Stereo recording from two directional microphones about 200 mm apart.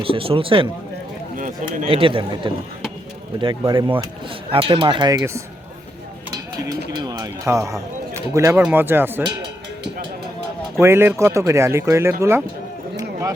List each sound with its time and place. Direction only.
0.0 s speech: 25° right (ahead or behind)
1.4 s speech: 40° right (ahead or behind)
1.9 s speech: 25° right (ahead or behind)
6.3 s a sound: 20° right (ahead or behind)
8.6 s speech: 10° right (ahead or behind)
10.8 s speech: 15° right (ahead or behind)